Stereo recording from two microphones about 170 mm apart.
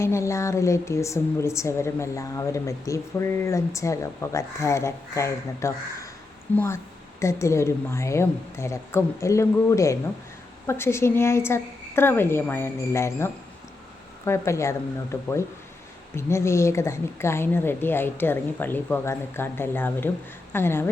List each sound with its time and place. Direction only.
0.0 s a woman's voice: 15° left (ahead or behind)